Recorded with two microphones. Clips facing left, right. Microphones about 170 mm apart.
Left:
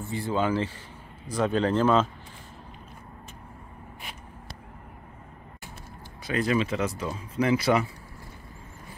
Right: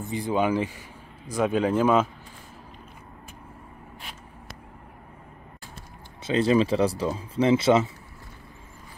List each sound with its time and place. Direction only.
0.0 s speech: 15° right (ahead or behind)
6.2 s speech: 25° right (ahead or behind)